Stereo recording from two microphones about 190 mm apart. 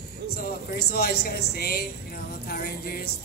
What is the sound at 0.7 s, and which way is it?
Speech, 55° left (ahead or behind).